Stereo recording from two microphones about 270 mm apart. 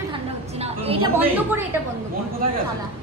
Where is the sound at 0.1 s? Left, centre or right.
Right.